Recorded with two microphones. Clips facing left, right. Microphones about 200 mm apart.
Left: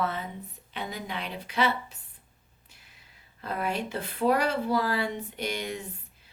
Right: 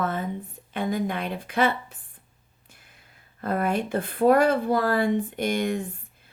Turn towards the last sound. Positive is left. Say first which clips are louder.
# right 6 dB
turn(degrees=-50)  # may be behind; listen again after turning